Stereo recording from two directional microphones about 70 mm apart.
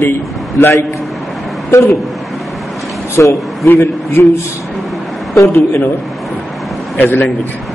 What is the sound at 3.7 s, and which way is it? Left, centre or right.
Speech, left.